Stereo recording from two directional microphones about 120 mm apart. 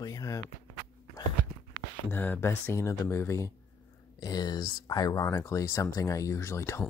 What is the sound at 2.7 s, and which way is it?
Speech, 25° left (ahead or behind).